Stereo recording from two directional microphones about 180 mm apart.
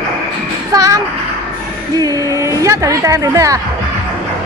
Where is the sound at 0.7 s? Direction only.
20° right (ahead or behind).